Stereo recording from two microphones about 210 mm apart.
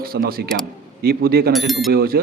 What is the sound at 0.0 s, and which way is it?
A man's voice, 45° right (ahead or behind).